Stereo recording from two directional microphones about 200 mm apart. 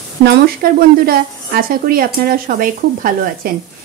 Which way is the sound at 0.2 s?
50° right (ahead or behind).